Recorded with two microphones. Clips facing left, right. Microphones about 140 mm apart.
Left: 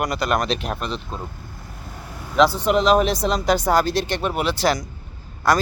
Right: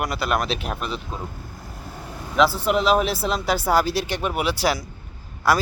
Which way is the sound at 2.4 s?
5° right (ahead or behind).